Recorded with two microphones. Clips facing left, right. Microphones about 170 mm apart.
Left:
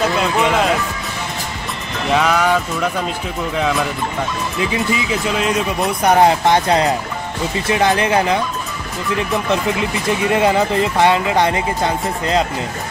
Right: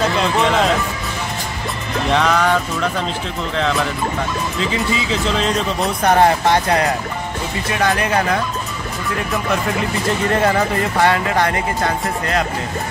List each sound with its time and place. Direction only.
0.0 s speech: 5° left (ahead or behind)
2.1 s speech: 5° left (ahead or behind)
4.6 s speech: 15° left (ahead or behind)
9.5 s speech: 15° left (ahead or behind)